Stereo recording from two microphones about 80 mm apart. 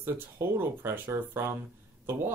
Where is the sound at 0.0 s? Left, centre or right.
Right.